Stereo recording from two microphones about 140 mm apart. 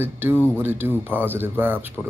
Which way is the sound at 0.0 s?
15° right (ahead or behind).